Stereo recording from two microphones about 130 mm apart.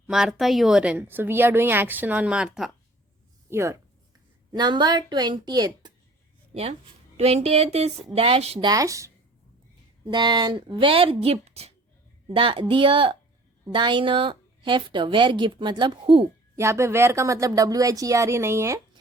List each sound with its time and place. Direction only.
0.1 s speech: 5° right (ahead or behind)
3.5 s speech: 20° right (ahead or behind)
4.5 s a woman's voice: 35° right (ahead or behind)
6.5 s speech: 50° right (ahead or behind)
8.6 s speech: 25° right (ahead or behind)
10.1 s a woman's voice: 35° right (ahead or behind)
16.6 s speech: 20° right (ahead or behind)